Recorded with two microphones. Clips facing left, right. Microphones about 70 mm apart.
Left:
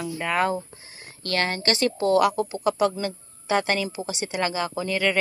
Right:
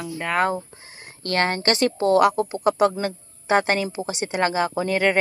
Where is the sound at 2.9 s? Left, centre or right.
Right.